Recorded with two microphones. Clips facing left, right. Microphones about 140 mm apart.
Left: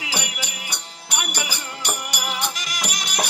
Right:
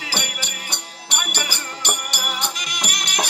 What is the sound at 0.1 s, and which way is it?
Music, 5° left (ahead or behind).